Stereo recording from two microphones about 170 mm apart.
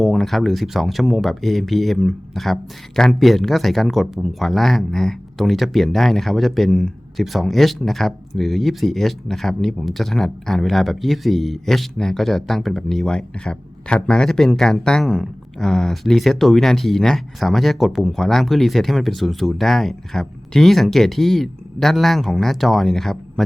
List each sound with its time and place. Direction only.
0.0 s speech: centre (ahead or behind)